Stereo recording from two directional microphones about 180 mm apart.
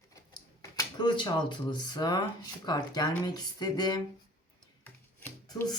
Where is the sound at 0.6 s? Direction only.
20° left (ahead or behind).